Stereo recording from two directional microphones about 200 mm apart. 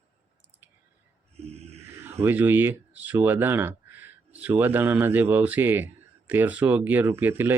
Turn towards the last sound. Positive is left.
turn(degrees=-10)  # may be behind; listen again after turning